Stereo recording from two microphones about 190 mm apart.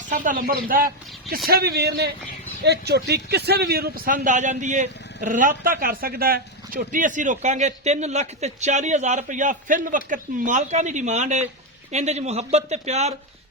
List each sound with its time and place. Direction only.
0.1 s a man's voice: 45° right (ahead or behind)